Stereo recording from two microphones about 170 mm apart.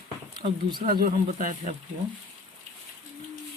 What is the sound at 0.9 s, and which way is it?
Speech, 55° right (ahead or behind).